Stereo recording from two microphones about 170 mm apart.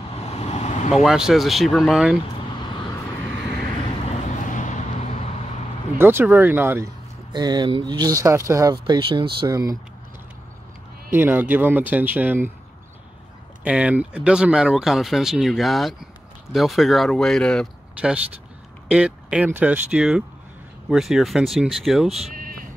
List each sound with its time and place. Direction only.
0.1 s vehicle: 40° left (ahead or behind)
0.9 s speech: 5° right (ahead or behind)
4.0 s vehicle: 40° left (ahead or behind)
5.9 s speech: 10° right (ahead or behind)
7.3 s speech: 25° right (ahead or behind)
11.1 s speech: 10° right (ahead or behind)
13.7 s speech: 10° right (ahead or behind)
18.9 s speech: 5° right (ahead or behind)
22.3 s bleat: 55° right (ahead or behind)